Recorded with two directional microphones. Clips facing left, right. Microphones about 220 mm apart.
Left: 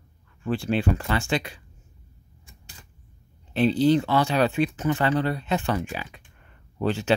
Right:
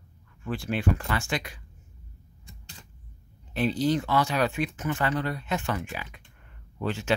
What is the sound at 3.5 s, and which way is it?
Speech, 30° left (ahead or behind).